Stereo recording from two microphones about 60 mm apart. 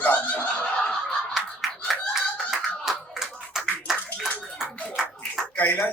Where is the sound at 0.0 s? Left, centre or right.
Left.